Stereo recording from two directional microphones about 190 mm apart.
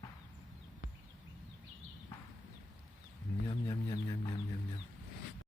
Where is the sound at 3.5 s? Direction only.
25° left (ahead or behind).